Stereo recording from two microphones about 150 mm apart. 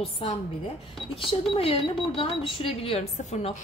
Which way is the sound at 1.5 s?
35° left (ahead or behind).